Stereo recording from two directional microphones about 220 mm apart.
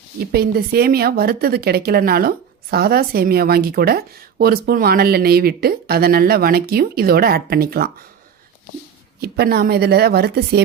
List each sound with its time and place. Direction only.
0.3 s a woman's voice: 45° right (ahead or behind)
9.2 s a woman's voice: 45° right (ahead or behind)